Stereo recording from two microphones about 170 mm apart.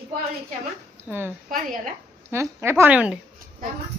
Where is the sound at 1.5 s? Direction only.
50° right (ahead or behind).